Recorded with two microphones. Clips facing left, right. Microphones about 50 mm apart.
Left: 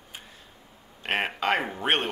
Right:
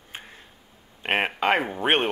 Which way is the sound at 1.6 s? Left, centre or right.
Centre.